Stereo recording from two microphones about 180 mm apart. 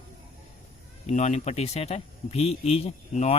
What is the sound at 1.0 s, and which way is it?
Speech, 40° left (ahead or behind).